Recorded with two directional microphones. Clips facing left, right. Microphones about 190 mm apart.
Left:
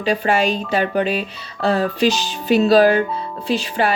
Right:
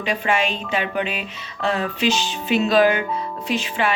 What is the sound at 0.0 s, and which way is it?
A woman's voice, 35° left (ahead or behind).